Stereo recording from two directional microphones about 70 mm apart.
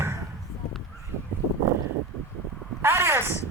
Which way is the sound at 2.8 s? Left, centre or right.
Right.